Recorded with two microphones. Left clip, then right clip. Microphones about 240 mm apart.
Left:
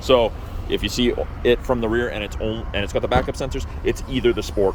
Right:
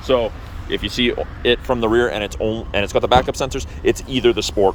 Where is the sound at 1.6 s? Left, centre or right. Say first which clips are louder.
Right 4 dB; centre.